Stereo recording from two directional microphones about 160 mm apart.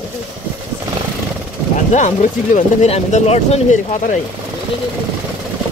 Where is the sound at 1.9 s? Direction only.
50° left (ahead or behind).